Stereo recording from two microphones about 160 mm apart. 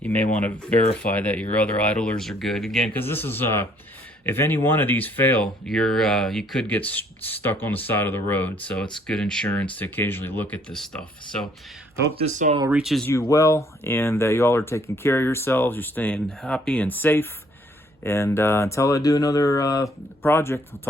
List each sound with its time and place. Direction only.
0.0 s speech: 10° left (ahead or behind)
2.9 s speech: 15° left (ahead or behind)
12.1 s speech: 45° right (ahead or behind)
12.7 s speech: centre (ahead or behind)
13.1 s speech: 20° left (ahead or behind)